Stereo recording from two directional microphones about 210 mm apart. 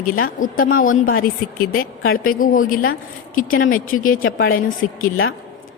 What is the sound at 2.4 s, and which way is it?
A woman's voice, 40° left (ahead or behind).